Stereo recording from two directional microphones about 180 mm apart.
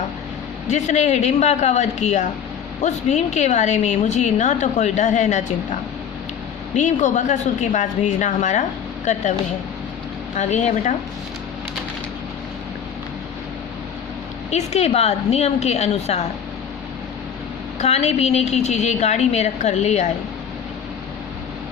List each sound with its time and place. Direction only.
0.7 s a woman's voice: 40° left (ahead or behind)
6.7 s a woman's voice: 40° left (ahead or behind)
10.3 s a woman's voice: 40° left (ahead or behind)
14.5 s a woman's voice: 40° left (ahead or behind)
17.7 s a woman's voice: 35° left (ahead or behind)